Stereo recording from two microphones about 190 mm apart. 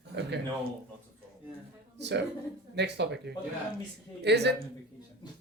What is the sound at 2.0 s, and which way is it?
Speech, 65° right (ahead or behind).